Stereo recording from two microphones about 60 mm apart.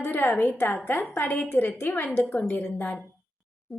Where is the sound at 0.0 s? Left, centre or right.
Left.